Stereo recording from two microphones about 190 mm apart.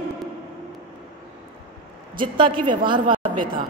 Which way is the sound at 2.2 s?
25° right (ahead or behind).